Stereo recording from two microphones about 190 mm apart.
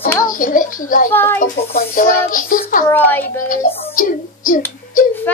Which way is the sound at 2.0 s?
45° left (ahead or behind).